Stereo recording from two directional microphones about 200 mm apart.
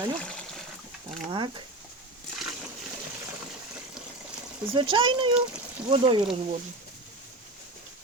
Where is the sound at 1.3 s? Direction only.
25° right (ahead or behind).